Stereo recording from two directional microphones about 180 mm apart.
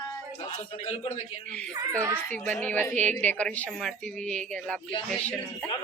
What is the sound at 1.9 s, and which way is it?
Speech, 15° right (ahead or behind).